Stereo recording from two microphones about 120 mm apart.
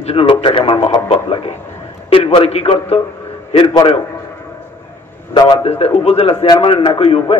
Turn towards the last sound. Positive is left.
turn(degrees=55)  # may be behind; listen again after turning